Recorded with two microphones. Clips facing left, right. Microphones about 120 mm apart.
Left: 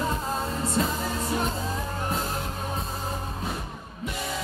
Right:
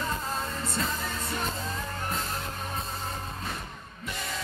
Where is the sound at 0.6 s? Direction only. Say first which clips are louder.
Left 8 dB; 5° left (ahead or behind).